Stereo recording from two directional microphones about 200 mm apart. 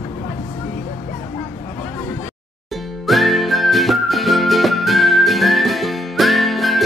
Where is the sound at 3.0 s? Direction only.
Centre (ahead or behind).